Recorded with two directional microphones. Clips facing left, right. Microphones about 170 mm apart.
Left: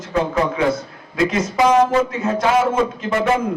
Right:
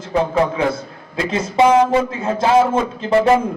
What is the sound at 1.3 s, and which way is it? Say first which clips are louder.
A man's voice: right 4 dB; 30° right (ahead or behind).